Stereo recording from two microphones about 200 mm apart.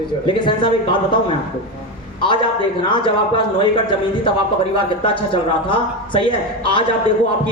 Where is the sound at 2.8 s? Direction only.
25° left (ahead or behind).